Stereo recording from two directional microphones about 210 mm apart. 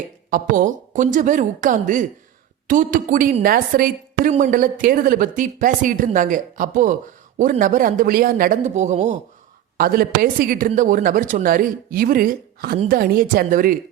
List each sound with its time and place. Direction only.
0.3 s a woman's voice: 40° right (ahead or behind)
9.7 s a woman's voice: 45° right (ahead or behind)